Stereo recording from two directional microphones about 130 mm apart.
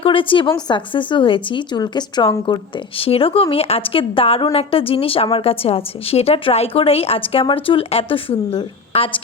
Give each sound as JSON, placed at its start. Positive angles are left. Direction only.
{"t": 0.0, "sound": "a woman's voice", "side_deg": 45}